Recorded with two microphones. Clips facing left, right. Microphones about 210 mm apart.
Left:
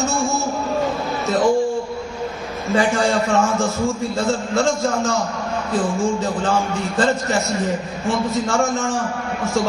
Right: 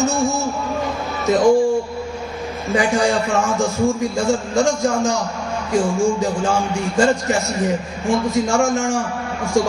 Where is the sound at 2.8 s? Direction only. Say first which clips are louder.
Right 1 dB; 15° right (ahead or behind).